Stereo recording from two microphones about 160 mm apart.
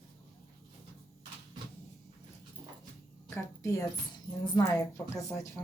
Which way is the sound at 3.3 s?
20° left (ahead or behind).